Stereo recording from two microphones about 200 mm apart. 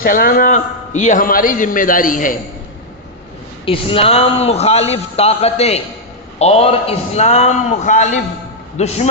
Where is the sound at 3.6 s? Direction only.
25° left (ahead or behind).